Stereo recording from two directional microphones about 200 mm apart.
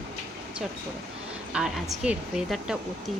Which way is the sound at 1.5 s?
5° right (ahead or behind).